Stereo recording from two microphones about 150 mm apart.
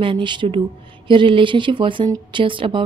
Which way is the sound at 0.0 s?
35° right (ahead or behind).